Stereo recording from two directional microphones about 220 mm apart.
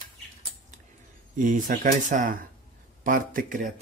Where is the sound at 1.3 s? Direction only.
35° right (ahead or behind).